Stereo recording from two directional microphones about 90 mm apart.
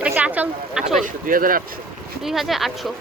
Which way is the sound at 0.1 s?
20° right (ahead or behind).